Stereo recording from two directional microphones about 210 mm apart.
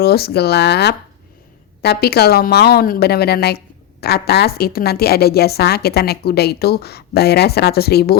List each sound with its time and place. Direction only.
0.0 s a woman's voice: 50° left (ahead or behind)